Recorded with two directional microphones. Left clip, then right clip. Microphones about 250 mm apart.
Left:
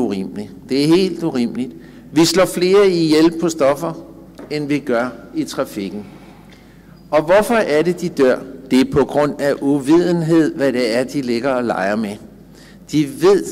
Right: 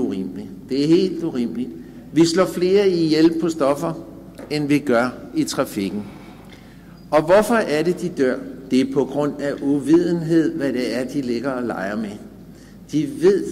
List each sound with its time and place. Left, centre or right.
0.0 s a man's voice: centre
7.1 s a man's voice: centre